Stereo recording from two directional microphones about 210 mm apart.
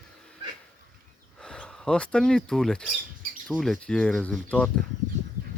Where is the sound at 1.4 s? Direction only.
5° left (ahead or behind).